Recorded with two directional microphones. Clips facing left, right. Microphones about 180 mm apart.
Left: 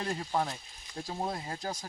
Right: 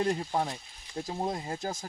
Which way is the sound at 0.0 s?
20° right (ahead or behind).